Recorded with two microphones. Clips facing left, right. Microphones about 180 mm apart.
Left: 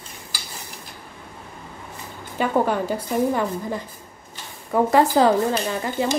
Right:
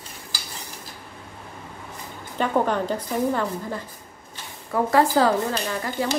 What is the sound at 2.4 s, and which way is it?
A woman's voice, 10° left (ahead or behind).